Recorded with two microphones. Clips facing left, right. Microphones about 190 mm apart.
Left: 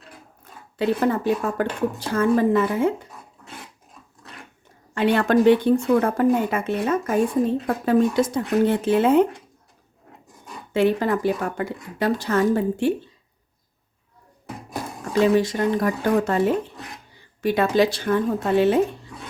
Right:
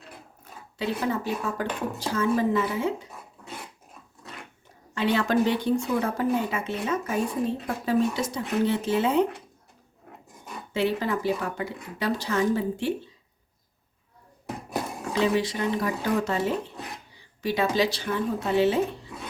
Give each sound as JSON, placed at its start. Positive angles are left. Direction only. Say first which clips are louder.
{"t": 0.8, "sound": "speech", "louder": "left 7 dB", "side_deg": 55}
{"t": 4.9, "sound": "speech", "louder": "left 5 dB", "side_deg": 55}
{"t": 10.8, "sound": "speech", "louder": "left 6 dB", "side_deg": 50}
{"t": 15.1, "sound": "speech", "louder": "left 6 dB", "side_deg": 45}